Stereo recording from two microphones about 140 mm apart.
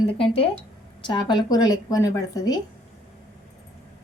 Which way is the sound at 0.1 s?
40° left (ahead or behind).